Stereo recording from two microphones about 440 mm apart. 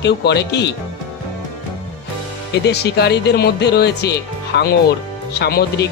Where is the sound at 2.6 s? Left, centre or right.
Left.